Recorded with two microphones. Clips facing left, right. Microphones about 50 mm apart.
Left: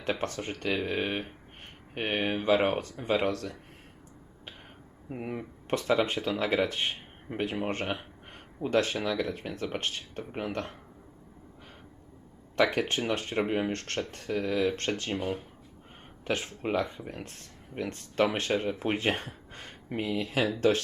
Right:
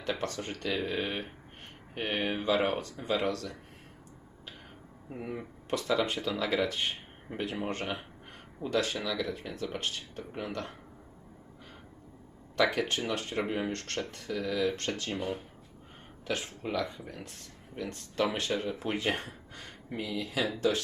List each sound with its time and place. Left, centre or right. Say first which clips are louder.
0.0 s speech: left 2 dB; left
5.0 s speech: left 2 dB; left
12.5 s speech: left 2 dB; left
16.2 s speech: left 3 dB; left